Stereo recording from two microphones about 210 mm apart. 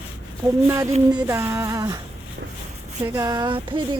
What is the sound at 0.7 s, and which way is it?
Music, 15° right (ahead or behind).